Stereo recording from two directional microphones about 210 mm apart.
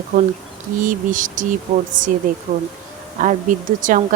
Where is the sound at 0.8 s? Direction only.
40° right (ahead or behind).